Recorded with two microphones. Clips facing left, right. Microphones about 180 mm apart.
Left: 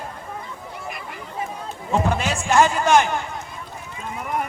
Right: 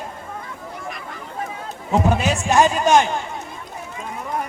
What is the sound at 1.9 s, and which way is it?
A man's voice, 20° right (ahead or behind).